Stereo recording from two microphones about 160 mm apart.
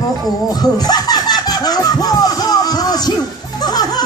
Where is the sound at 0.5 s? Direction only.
25° left (ahead or behind).